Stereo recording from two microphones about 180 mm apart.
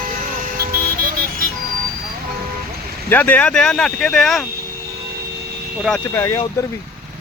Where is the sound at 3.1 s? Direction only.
10° left (ahead or behind).